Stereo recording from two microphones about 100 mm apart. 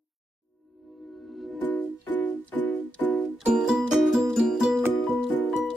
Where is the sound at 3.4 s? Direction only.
5° right (ahead or behind).